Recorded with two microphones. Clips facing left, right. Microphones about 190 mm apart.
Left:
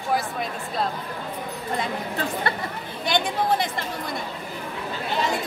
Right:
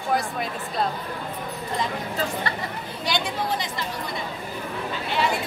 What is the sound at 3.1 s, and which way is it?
Speech, 55° left (ahead or behind).